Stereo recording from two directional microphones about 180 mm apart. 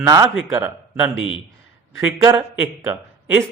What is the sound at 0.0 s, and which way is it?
A man's voice, 20° right (ahead or behind).